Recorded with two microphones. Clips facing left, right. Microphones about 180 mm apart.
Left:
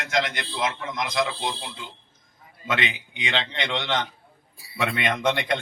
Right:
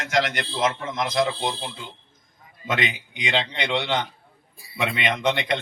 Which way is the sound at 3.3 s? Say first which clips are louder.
Right 3 dB; 10° right (ahead or behind).